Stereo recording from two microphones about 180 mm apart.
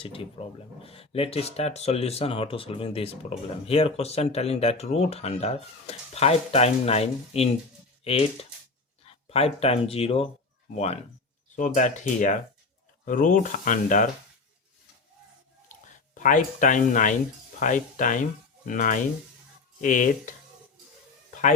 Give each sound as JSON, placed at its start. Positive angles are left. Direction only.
{"t": 0.0, "sound": "speech", "side_deg": 30}
{"t": 15.7, "sound": "speech", "side_deg": 45}